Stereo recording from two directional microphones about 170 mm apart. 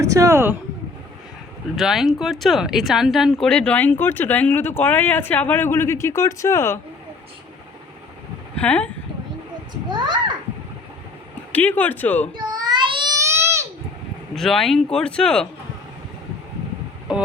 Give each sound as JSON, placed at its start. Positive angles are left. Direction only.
{"t": 0.0, "sound": "speech", "side_deg": -20}
{"t": 1.7, "sound": "speech", "side_deg": 0}
{"t": 8.5, "sound": "speech", "side_deg": 5}
{"t": 11.5, "sound": "speech", "side_deg": 10}
{"t": 12.4, "sound": "a sound", "side_deg": -25}
{"t": 14.3, "sound": "speech", "side_deg": 0}